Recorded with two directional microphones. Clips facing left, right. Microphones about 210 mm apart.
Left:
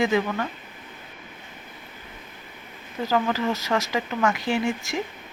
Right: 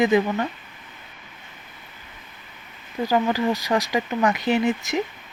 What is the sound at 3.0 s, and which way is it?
Speech, 15° right (ahead or behind).